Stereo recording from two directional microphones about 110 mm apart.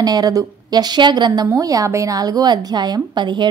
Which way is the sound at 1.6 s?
30° right (ahead or behind).